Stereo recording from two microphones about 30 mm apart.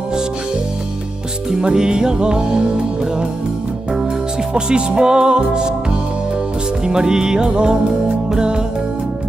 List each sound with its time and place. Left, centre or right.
1.6 s music: right
4.6 s music: right
6.9 s music: right